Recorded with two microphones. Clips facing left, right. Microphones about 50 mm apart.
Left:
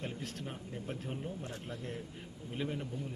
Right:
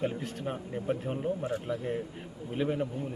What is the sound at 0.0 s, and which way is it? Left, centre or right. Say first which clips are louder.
Speech: right 9 dB; centre.